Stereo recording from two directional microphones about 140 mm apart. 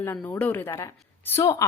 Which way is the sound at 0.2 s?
10° left (ahead or behind).